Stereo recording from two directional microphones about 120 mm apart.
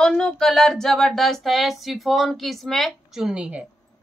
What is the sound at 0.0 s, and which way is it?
A woman's voice, 5° left (ahead or behind).